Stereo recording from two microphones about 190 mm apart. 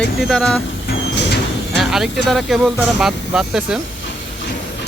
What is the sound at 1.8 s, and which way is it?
Speech, centre (ahead or behind).